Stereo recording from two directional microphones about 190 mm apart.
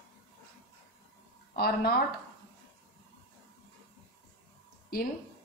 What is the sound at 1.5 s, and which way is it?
Speech, 55° left (ahead or behind).